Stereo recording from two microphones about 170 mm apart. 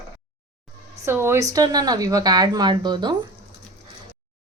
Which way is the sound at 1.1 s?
15° right (ahead or behind).